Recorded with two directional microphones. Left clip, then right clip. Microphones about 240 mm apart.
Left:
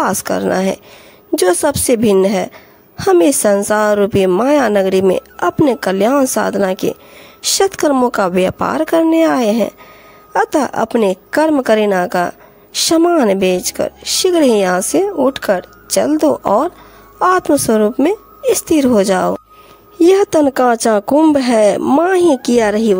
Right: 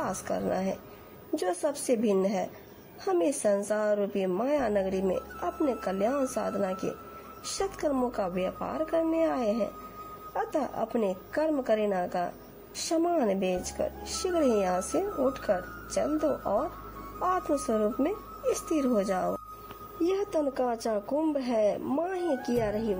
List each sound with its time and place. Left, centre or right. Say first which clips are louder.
0.0 s a woman's voice: left 16 dB; left